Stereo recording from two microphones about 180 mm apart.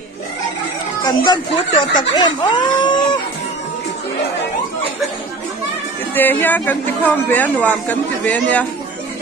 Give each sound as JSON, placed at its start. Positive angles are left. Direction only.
{"t": 1.0, "sound": "speech", "side_deg": 25}
{"t": 6.1, "sound": "speech", "side_deg": 10}